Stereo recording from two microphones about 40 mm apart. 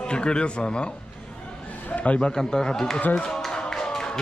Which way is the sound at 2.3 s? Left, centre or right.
Centre.